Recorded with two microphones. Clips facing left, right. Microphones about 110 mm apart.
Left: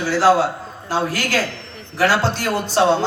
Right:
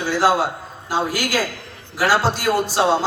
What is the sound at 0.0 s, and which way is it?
A man's voice, 15° right (ahead or behind).